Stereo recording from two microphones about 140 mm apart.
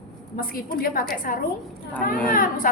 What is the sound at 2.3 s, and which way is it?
Speech, 80° left.